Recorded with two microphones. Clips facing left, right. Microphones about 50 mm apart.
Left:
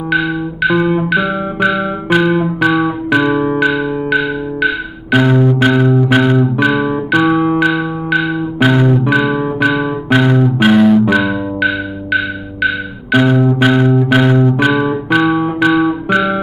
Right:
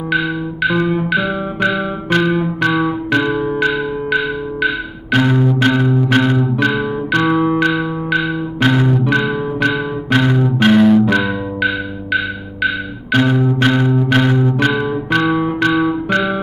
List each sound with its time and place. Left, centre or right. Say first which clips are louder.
0.1 s music: left 3 dB; centre